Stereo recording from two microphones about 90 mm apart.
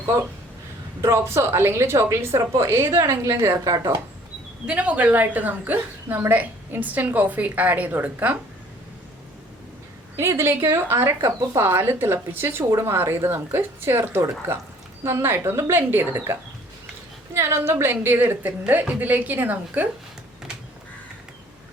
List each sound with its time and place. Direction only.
1.0 s a woman's voice: 30° right (ahead or behind)
4.6 s a woman's voice: 15° right (ahead or behind)
10.2 s a woman's voice: 30° right (ahead or behind)